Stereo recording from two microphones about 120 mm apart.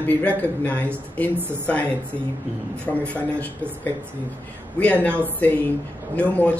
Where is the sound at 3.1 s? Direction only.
15° left (ahead or behind).